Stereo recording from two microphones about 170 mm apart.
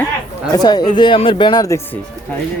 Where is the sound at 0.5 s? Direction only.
25° left (ahead or behind).